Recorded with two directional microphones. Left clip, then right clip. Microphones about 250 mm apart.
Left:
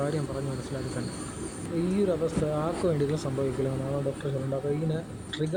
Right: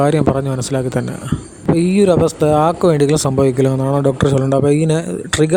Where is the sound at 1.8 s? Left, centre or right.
Right.